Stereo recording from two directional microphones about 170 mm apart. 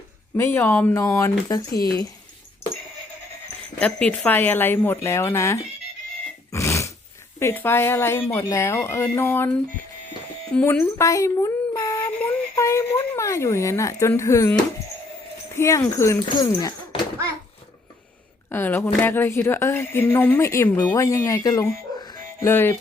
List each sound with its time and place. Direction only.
0.3 s speech: 15° left (ahead or behind)
1.7 s speech: 60° left (ahead or behind)
3.8 s speech: 10° left (ahead or behind)
6.5 s a sound: 20° left (ahead or behind)
7.3 s speech: 15° left (ahead or behind)
18.4 s speech: 15° left (ahead or behind)